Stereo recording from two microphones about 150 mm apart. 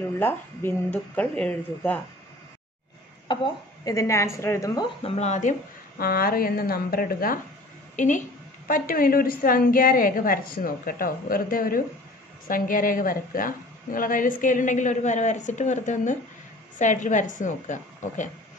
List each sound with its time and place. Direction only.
0.2 s speech: 15° left (ahead or behind)
3.3 s a woman's voice: 30° left (ahead or behind)
5.0 s a woman's voice: 45° left (ahead or behind); by 7.3 s 75° left (ahead or behind)
7.9 s a woman's voice: 55° left (ahead or behind)
8.6 s a woman's voice: 70° left (ahead or behind)